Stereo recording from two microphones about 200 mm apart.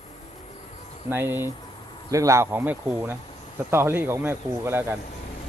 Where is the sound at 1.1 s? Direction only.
10° right (ahead or behind).